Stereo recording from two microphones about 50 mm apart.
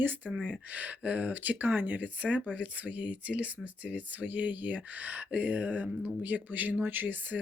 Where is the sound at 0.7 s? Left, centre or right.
Right.